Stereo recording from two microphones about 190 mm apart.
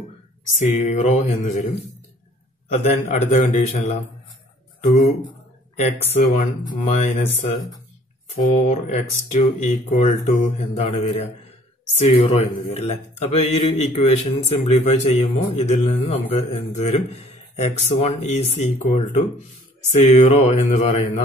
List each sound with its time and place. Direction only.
0.8 s speech: 35° left (ahead or behind)
2.7 s speech: 35° left (ahead or behind)
6.0 s speech: 35° left (ahead or behind)
8.6 s speech: 40° left (ahead or behind)